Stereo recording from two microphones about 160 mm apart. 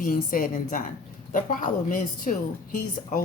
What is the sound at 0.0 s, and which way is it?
A woman's voice, 60° left (ahead or behind).